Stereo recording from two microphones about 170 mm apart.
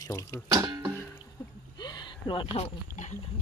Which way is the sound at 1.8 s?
25° left (ahead or behind).